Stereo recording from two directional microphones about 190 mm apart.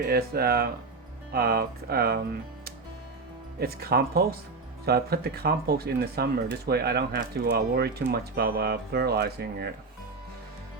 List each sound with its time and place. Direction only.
0.0 s speech: 55° right (ahead or behind)
3.6 s speech: 55° right (ahead or behind)